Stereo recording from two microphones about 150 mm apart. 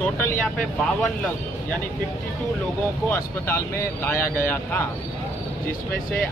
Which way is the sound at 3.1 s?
15° left (ahead or behind).